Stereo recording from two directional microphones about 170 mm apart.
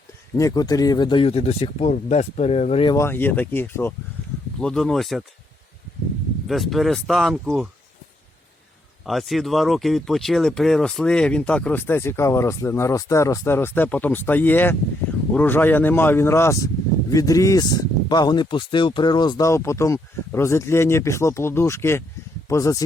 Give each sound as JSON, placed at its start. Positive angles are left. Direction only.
{"t": 0.3, "sound": "speech", "side_deg": 20}
{"t": 2.8, "sound": "speech", "side_deg": 20}
{"t": 6.5, "sound": "speech", "side_deg": 0}
{"t": 9.0, "sound": "speech", "side_deg": 0}